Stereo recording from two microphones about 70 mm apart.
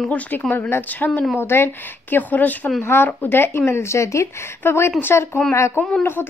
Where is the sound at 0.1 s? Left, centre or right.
Left.